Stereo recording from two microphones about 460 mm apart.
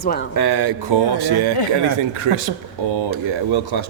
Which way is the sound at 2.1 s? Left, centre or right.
Right.